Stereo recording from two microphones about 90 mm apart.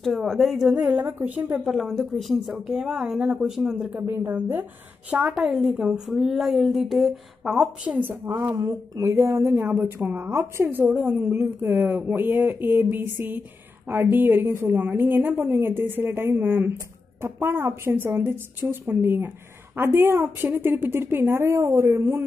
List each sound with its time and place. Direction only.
0.0 s a woman's voice: centre (ahead or behind); by 1.6 s 20° right (ahead or behind)
1.6 s a woman's voice: centre (ahead or behind)
3.9 s a woman's voice: 20° right (ahead or behind)
5.1 s a woman's voice: 10° right (ahead or behind)
7.8 s a woman's voice: 15° right (ahead or behind)
8.5 s a woman's voice: 40° right (ahead or behind); by 10.9 s 25° right (ahead or behind)
10.9 s a woman's voice: 10° right (ahead or behind)